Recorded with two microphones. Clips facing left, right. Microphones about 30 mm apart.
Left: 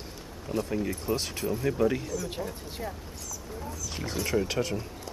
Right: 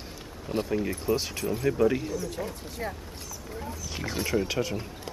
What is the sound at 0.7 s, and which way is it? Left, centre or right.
Speech, centre.